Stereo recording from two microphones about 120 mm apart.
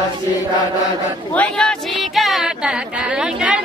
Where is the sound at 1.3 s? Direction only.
10° left (ahead or behind).